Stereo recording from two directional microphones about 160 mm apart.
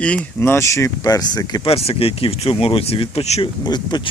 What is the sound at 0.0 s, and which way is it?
Speech, 5° left (ahead or behind).